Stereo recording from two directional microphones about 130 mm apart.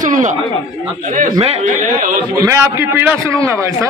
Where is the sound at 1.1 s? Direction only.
60° right (ahead or behind).